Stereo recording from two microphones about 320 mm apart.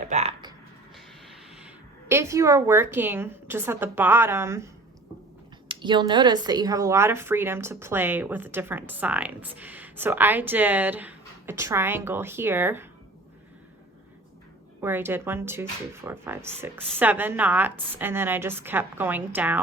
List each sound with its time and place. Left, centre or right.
0.1 s typing: centre
0.9 s music: centre
2.0 s speech: centre
14.8 s speech: centre